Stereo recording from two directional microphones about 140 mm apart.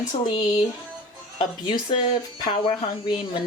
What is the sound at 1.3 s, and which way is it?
Speech, 35° left (ahead or behind).